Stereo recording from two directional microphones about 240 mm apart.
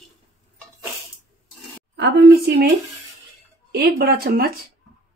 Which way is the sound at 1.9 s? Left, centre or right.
Right.